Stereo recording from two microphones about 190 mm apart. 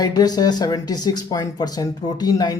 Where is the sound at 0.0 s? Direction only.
20° left (ahead or behind).